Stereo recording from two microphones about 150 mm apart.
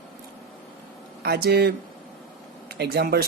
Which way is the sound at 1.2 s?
90° right.